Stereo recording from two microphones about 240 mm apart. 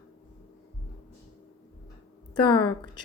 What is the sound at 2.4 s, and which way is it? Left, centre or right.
Speech, centre.